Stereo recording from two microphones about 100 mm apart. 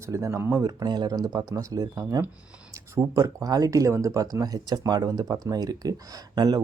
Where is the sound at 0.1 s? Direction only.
30° right (ahead or behind).